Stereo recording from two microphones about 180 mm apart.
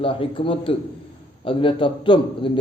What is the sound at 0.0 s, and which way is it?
A man's voice, 30° left (ahead or behind).